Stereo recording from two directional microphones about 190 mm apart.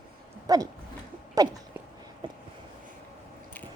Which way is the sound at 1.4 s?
20° right (ahead or behind).